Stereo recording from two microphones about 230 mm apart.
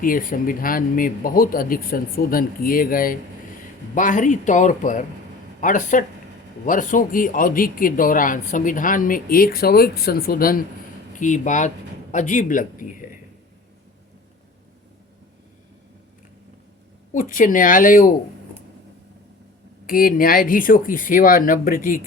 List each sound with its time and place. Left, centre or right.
0.0 s speech: left
17.1 s speech: left
19.9 s speech: left